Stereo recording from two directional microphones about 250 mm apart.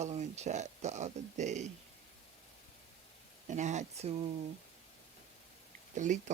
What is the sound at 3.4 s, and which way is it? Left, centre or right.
Speech, right.